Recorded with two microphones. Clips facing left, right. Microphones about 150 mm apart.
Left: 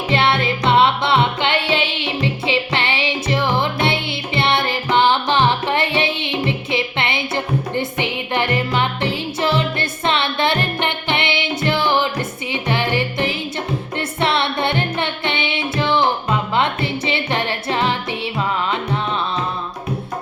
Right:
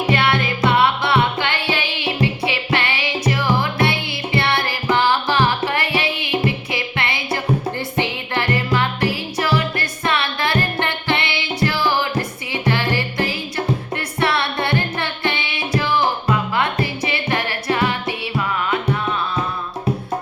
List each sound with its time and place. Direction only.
0.1 s music: 25° left (ahead or behind)